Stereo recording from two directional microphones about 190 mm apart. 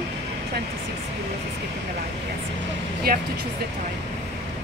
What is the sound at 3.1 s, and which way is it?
Speech, 50° right (ahead or behind).